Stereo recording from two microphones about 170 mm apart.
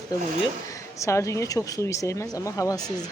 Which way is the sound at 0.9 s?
20° left (ahead or behind).